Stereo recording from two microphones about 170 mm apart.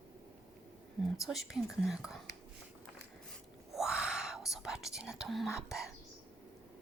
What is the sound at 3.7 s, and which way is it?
Whispering, centre (ahead or behind).